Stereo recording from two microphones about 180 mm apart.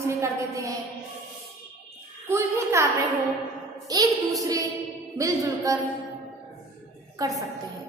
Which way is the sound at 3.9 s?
20° right (ahead or behind).